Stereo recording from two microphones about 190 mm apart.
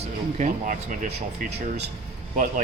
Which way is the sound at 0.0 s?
35° right (ahead or behind).